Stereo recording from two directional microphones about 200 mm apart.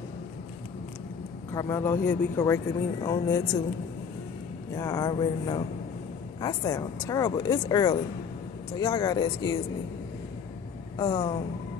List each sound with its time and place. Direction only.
1.5 s speech: 15° left (ahead or behind)
4.7 s a woman's voice: 15° left (ahead or behind)
11.0 s a woman's voice: 20° left (ahead or behind)